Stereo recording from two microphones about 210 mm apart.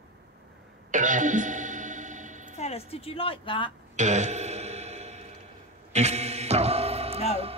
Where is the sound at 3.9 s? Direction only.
35° right (ahead or behind).